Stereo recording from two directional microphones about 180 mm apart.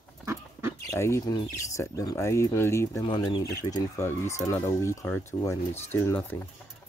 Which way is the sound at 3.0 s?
25° left (ahead or behind).